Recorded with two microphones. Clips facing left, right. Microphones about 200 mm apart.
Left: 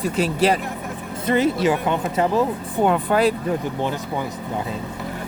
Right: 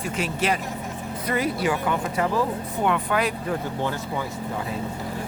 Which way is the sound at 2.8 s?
35° left (ahead or behind).